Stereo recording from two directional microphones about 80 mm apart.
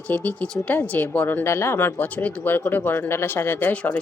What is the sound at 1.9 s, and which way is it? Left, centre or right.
Speech, centre.